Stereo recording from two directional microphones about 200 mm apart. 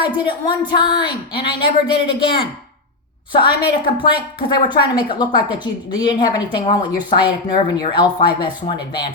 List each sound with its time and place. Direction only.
0.0 s a woman's voice: 20° left (ahead or behind)